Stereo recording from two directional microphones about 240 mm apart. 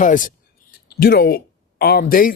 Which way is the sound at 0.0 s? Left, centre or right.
Left.